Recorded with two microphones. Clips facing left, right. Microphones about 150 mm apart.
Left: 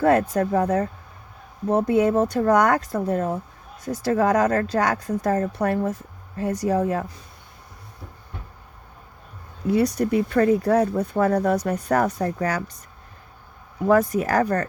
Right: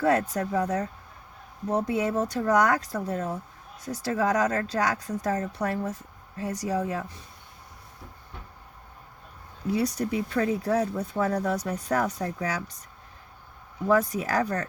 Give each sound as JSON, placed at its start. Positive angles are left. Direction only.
{"t": 0.0, "sound": "speech", "side_deg": 55}
{"t": 9.6, "sound": "speech", "side_deg": 55}
{"t": 13.8, "sound": "speech", "side_deg": 55}